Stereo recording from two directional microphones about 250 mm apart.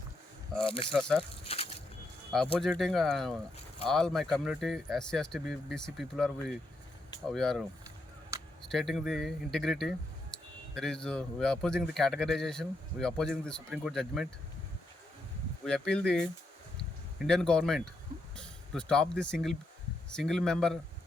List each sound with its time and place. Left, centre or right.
0.6 s speech: left
0.9 s speech: centre
1.5 s a sound: left
2.6 s speech: centre
8.6 s speech: centre
15.6 s speech: centre